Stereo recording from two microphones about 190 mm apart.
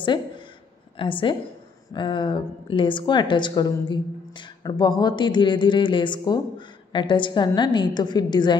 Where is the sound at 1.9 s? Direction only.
25° left (ahead or behind).